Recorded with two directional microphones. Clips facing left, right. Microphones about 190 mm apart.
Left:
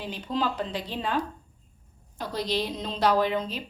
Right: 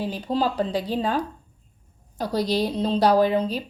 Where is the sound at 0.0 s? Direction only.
35° right (ahead or behind).